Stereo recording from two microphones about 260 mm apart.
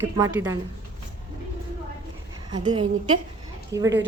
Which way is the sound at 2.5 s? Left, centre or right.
Centre.